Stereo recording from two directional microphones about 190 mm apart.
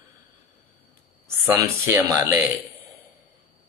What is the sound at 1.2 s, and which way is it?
Speech, 15° right (ahead or behind).